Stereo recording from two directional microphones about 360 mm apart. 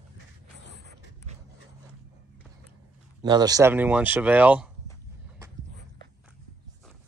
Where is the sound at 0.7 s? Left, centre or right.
Right.